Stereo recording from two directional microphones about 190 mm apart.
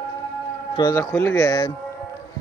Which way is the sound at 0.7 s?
15° left (ahead or behind).